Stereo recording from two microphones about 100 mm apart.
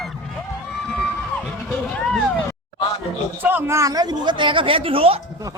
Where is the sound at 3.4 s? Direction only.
20° right (ahead or behind); by 5.2 s 70° right (ahead or behind).